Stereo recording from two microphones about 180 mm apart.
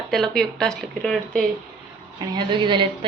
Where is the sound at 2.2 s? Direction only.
25° right (ahead or behind).